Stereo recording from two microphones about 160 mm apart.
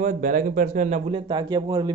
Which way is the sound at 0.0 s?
55° right (ahead or behind).